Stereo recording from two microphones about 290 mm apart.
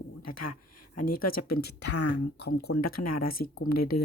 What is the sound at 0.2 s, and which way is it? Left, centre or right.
Speech, left.